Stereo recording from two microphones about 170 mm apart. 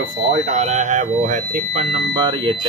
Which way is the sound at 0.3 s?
40° right (ahead or behind).